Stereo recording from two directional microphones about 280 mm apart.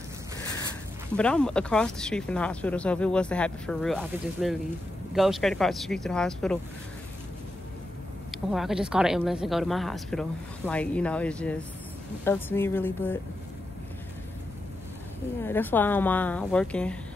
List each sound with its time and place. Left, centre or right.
1.1 s speech: centre
8.3 s a woman's voice: centre
15.4 s a woman's voice: centre